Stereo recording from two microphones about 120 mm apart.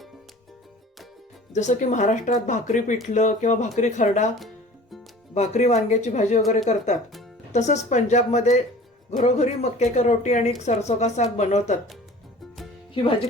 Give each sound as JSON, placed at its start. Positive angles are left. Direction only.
{"t": 1.5, "sound": "speech", "side_deg": 85}
{"t": 3.1, "sound": "speech", "side_deg": 80}
{"t": 4.4, "sound": "music", "side_deg": 0}
{"t": 5.3, "sound": "speech", "side_deg": 70}
{"t": 12.9, "sound": "speech", "side_deg": 45}